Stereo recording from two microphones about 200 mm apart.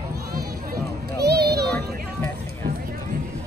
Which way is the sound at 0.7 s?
55° right (ahead or behind).